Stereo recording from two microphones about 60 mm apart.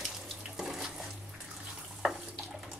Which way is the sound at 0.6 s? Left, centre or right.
Centre.